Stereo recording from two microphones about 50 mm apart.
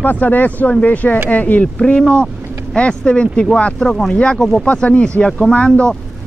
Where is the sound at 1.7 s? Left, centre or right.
Centre.